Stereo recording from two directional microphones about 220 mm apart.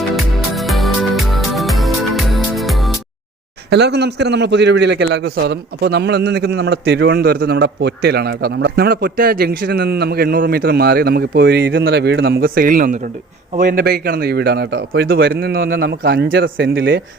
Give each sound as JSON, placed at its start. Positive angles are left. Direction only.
{"t": 0.2, "sound": "music", "side_deg": 0}
{"t": 3.7, "sound": "a man's voice", "side_deg": -50}